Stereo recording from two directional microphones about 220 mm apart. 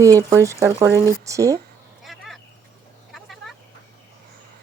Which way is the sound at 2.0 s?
Centre (ahead or behind).